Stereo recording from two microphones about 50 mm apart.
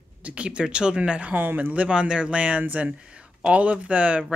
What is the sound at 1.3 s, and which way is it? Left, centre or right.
Speech, right.